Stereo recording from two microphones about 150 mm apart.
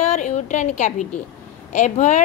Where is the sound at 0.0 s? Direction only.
50° left (ahead or behind).